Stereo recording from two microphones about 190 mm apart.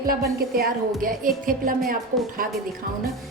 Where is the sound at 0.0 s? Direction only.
50° right (ahead or behind).